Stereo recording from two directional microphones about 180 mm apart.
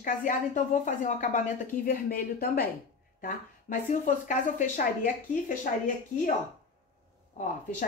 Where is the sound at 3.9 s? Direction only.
45° left (ahead or behind).